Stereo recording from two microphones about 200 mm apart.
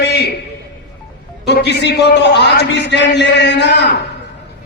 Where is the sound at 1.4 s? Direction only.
55° left (ahead or behind).